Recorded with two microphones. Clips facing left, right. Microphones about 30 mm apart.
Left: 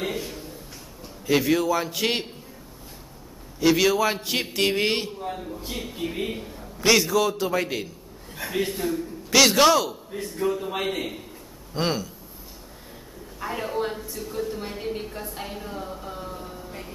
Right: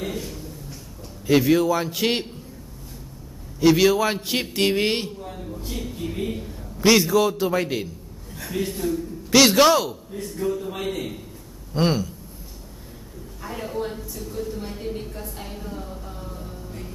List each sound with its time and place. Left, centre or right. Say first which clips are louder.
0.0 s a sound: left 1 dB; centre
1.2 s a man's voice: right 3 dB; centre
3.5 s a man's voice: right 3 dB; centre
5.2 s speech: left 2 dB; centre
6.8 s a man's voice: right 3 dB; centre
8.4 s speech: left 1 dB; left
9.3 s a man's voice: right 2 dB; centre
10.1 s speech: left 1 dB; centre
11.7 s a man's voice: right 4 dB; centre
13.4 s a woman's voice: left 2 dB; centre
14.5 s a sound: even; left
15.2 s music: left 1 dB; centre